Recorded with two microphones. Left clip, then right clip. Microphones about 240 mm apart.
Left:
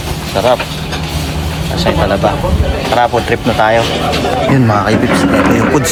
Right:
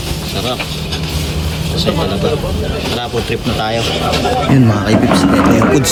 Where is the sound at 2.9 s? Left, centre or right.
Centre.